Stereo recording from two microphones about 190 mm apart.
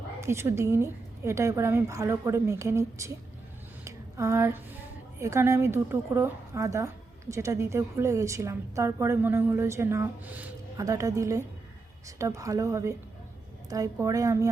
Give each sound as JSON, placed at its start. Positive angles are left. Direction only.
{"t": 0.2, "sound": "a woman's voice", "side_deg": -15}
{"t": 3.8, "sound": "a sound", "side_deg": -15}
{"t": 5.2, "sound": "a woman's voice", "side_deg": -15}